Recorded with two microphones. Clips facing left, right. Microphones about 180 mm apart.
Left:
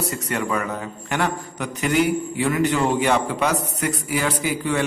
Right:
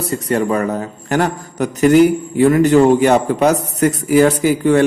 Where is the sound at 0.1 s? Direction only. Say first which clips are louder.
Right 8 dB; 35° right (ahead or behind).